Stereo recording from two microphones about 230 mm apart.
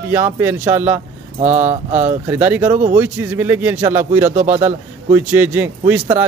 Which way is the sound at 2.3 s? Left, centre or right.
Centre.